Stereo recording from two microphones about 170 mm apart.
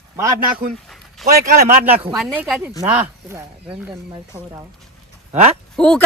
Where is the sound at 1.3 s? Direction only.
60° right (ahead or behind).